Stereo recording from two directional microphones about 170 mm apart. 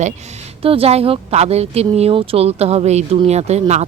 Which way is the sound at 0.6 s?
35° right (ahead or behind).